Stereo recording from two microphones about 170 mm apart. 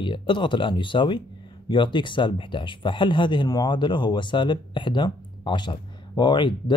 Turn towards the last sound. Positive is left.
turn(degrees=30)  # may be behind; listen again after turning